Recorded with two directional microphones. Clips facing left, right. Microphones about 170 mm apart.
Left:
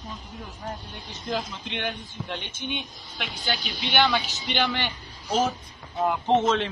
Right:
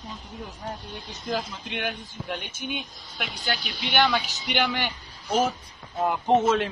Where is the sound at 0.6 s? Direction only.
Centre (ahead or behind).